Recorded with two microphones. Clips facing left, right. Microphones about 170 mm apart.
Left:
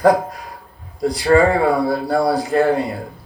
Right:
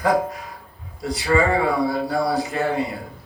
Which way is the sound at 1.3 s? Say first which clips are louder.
Left 5 dB; 45° left (ahead or behind).